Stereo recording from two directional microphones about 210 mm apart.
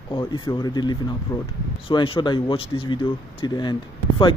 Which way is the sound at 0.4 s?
20° left (ahead or behind).